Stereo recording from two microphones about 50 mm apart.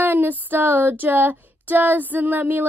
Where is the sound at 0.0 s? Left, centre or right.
Right.